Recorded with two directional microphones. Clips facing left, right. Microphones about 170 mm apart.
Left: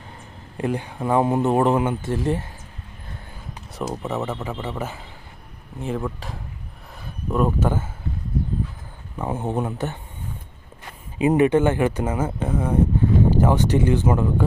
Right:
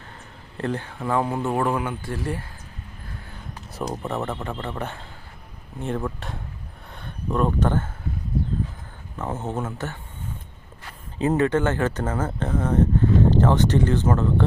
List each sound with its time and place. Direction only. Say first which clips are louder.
0.5 s speech: left 2 dB; 10° left (ahead or behind)
3.8 s a man's voice: left 1 dB; centre (ahead or behind)
9.1 s speech: left 3 dB; 15° left (ahead or behind)
11.2 s speech: left 4 dB; 15° left (ahead or behind)